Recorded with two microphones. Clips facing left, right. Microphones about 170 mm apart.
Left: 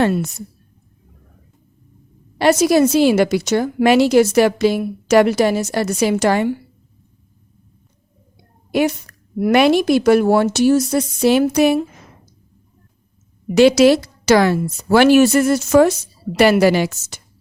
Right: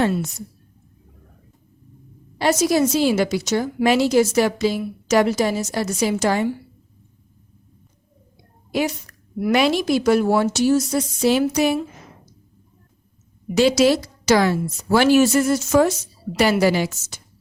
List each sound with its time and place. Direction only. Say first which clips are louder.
0.0 s a woman's voice: left 3 dB; 65° left (ahead or behind)
2.4 s a woman's voice: left 5 dB; 65° left (ahead or behind)
9.4 s a woman's voice: left 5 dB; 60° left (ahead or behind)
13.5 s a woman's voice: left 5 dB; 65° left (ahead or behind)